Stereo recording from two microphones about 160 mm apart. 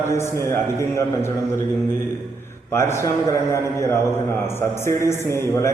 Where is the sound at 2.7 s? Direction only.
15° left (ahead or behind).